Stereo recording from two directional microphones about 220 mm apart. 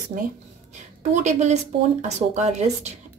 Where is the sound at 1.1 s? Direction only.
30° right (ahead or behind).